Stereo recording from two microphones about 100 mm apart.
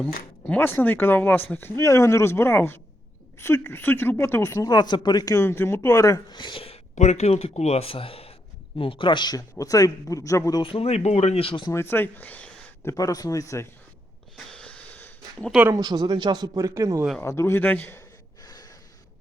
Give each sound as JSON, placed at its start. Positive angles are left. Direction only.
{"t": 0.0, "sound": "speech", "side_deg": 10}
{"t": 4.5, "sound": "speech", "side_deg": 40}
{"t": 5.4, "sound": "speech", "side_deg": 25}
{"t": 6.3, "sound": "speech", "side_deg": 55}
{"t": 8.8, "sound": "speech", "side_deg": 60}
{"t": 10.6, "sound": "speech", "side_deg": 75}
{"t": 11.7, "sound": "speech", "side_deg": 25}
{"t": 12.8, "sound": "speech", "side_deg": 30}
{"t": 14.3, "sound": "a sound", "side_deg": 10}
{"t": 15.7, "sound": "a man's voice", "side_deg": -45}
{"t": 17.2, "sound": "speech", "side_deg": 25}
{"t": 18.4, "sound": "gasp", "side_deg": 40}